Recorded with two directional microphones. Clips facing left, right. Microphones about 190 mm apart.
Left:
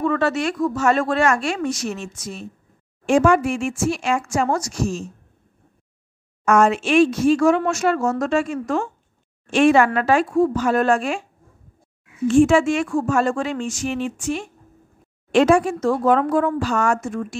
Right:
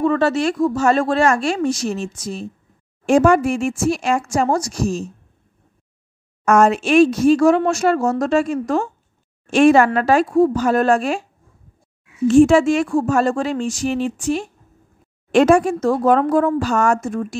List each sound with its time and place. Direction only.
0.0 s a woman's voice: 30° right (ahead or behind)
6.4 s a woman's voice: 40° right (ahead or behind)
12.3 s a woman's voice: 40° right (ahead or behind)